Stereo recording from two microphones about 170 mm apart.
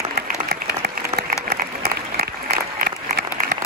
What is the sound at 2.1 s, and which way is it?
Applause, 65° right (ahead or behind).